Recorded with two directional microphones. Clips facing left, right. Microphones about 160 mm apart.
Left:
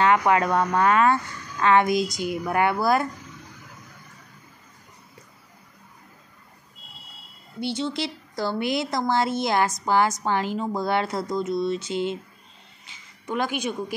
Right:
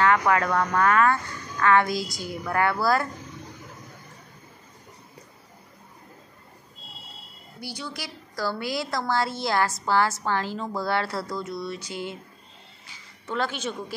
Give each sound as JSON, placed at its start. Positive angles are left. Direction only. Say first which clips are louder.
{"t": 0.0, "sound": "a woman's voice", "louder": "left 2 dB", "side_deg": 20}
{"t": 7.6, "sound": "a woman's voice", "louder": "left 9 dB", "side_deg": 25}